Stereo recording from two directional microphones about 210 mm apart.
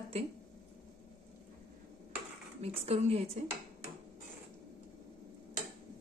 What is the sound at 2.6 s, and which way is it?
Speech, 30° right (ahead or behind).